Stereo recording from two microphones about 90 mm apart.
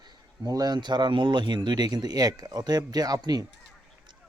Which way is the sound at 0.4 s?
45° right (ahead or behind).